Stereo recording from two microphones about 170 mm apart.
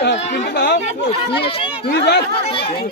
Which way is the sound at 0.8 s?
30° left (ahead or behind).